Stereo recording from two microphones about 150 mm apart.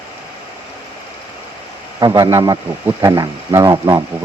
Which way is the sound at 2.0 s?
25° right (ahead or behind).